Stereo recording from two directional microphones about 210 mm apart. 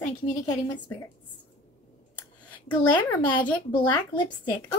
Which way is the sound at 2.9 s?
10° left (ahead or behind).